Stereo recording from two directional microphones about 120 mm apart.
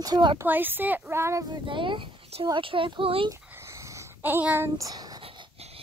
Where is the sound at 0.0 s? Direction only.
35° right (ahead or behind).